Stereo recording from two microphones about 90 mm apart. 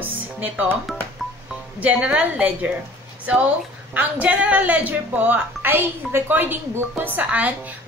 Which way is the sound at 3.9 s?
15° right (ahead or behind).